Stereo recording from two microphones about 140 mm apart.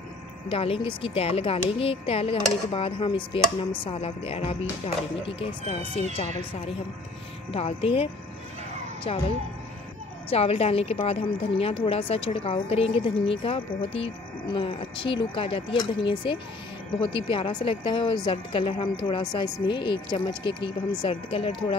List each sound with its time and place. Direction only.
0.5 s a woman's voice: 40° left (ahead or behind)
7.5 s speech: 45° left (ahead or behind)
10.3 s a woman's voice: 45° left (ahead or behind)